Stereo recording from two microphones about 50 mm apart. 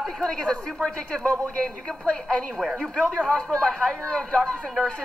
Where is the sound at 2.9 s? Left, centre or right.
Left.